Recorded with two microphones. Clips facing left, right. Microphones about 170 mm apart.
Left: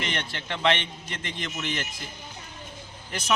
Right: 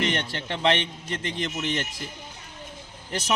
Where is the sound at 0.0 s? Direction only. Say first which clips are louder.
Right 5 dB; 35° right (ahead or behind).